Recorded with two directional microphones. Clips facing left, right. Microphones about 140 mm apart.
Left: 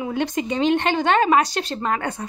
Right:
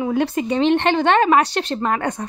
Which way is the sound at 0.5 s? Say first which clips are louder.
Right 3 dB; 10° left (ahead or behind).